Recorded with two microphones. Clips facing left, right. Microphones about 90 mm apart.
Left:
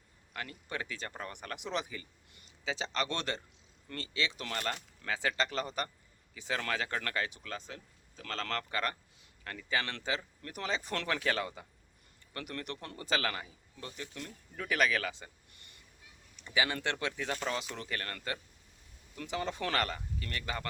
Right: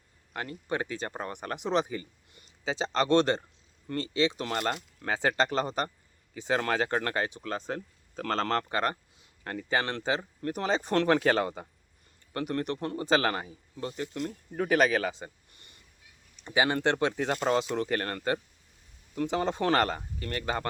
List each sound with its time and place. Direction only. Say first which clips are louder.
0.3 s speech: right 8 dB; 35° right (ahead or behind)
16.4 s speech: right 7 dB; 35° right (ahead or behind)